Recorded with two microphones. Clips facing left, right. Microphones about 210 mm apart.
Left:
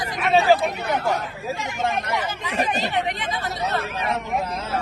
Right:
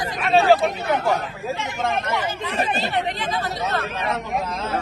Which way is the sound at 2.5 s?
15° left (ahead or behind).